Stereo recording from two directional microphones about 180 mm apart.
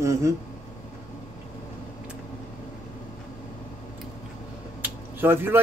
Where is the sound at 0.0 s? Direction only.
15° right (ahead or behind).